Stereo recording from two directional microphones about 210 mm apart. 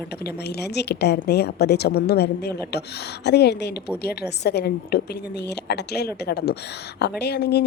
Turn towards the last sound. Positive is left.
turn(degrees=50)  # may be behind; listen again after turning